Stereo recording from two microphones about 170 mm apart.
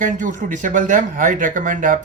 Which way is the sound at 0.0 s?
50° right (ahead or behind).